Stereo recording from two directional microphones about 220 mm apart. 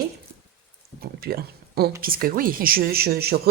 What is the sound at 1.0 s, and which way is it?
Speech, 45° right (ahead or behind).